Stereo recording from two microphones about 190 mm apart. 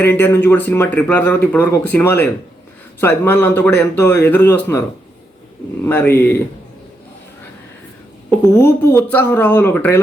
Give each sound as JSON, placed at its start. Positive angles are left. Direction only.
{"t": 0.0, "sound": "a man's voice", "side_deg": 10}
{"t": 5.8, "sound": "a man's voice", "side_deg": 10}
{"t": 8.5, "sound": "a man's voice", "side_deg": 10}